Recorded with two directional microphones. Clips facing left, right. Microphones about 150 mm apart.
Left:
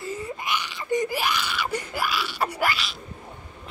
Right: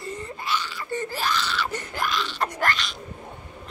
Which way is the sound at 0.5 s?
15° left (ahead or behind).